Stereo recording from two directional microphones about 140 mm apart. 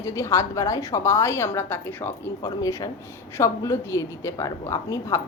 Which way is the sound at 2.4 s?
25° left (ahead or behind).